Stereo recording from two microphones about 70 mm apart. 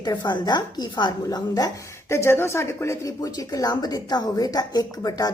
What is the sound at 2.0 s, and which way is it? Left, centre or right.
Speech, left.